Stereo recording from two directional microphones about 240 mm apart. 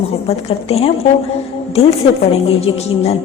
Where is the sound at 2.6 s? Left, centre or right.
Left.